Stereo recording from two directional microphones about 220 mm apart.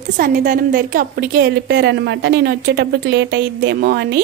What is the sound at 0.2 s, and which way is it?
A woman's voice, 40° right (ahead or behind).